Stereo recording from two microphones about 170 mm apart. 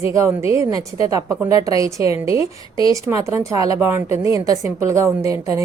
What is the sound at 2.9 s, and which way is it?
A woman's voice, 20° right (ahead or behind).